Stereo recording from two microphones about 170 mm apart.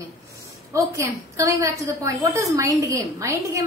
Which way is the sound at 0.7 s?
20° right (ahead or behind).